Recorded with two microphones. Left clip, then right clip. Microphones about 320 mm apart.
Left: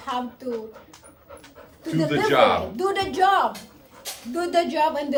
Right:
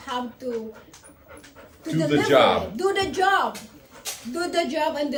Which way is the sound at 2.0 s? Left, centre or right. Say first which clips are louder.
Right 1 dB; centre.